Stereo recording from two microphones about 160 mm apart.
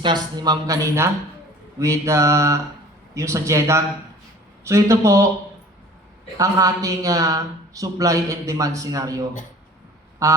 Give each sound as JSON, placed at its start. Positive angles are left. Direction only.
{"t": 0.0, "sound": "a man's voice", "side_deg": -25}
{"t": 6.3, "sound": "a man's voice", "side_deg": -20}